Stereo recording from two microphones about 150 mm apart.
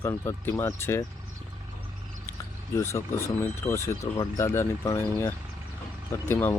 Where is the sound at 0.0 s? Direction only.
20° left (ahead or behind).